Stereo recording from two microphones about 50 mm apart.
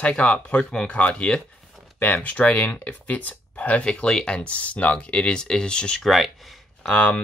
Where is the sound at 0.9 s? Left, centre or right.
Left.